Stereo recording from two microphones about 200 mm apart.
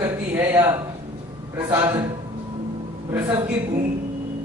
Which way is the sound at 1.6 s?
15° right (ahead or behind).